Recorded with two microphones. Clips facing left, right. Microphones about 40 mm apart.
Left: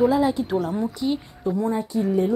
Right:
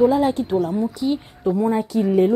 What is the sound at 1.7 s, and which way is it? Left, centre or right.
Speech, right.